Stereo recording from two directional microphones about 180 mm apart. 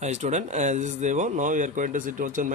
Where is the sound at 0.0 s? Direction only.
40° right (ahead or behind).